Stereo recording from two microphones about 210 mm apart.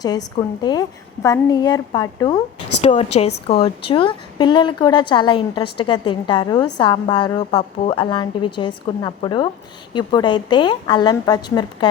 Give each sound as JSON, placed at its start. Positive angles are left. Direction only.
{"t": 0.0, "sound": "a woman's voice", "side_deg": 20}